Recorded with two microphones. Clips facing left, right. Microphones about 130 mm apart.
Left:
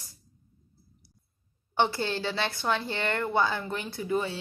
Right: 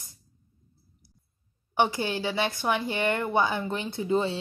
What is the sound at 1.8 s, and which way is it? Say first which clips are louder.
A woman's voice: right 1 dB; 15° right (ahead or behind).